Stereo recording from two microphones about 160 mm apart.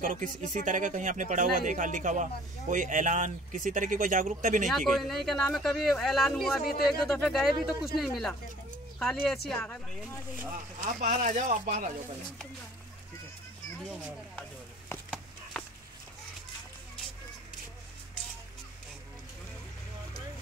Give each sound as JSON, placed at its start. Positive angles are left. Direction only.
{"t": 0.0, "sound": "speech", "side_deg": -55}
{"t": 4.6, "sound": "speech", "side_deg": 0}
{"t": 10.5, "sound": "speech", "side_deg": -55}
{"t": 13.7, "sound": "speech", "side_deg": 5}
{"t": 15.5, "sound": "dog", "side_deg": 5}